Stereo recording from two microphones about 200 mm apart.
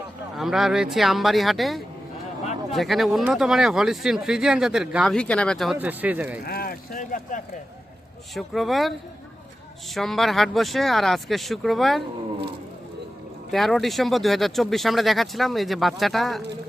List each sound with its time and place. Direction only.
0.3 s speech: centre (ahead or behind)
5.7 s speech: 10° right (ahead or behind)
6.4 s speech: 50° left (ahead or behind)
8.4 s speech: centre (ahead or behind)
13.5 s speech: centre (ahead or behind)